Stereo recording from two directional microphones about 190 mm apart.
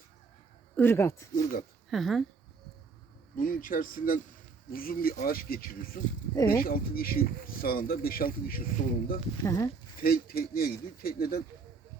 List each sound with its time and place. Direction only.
0.8 s speech: 15° left (ahead or behind)
1.9 s speech: centre (ahead or behind)
3.3 s speech: 45° left (ahead or behind)
6.3 s speech: 15° left (ahead or behind)
6.6 s speech: 50° left (ahead or behind)
9.4 s speech: 15° left (ahead or behind)
10.0 s speech: 50° left (ahead or behind)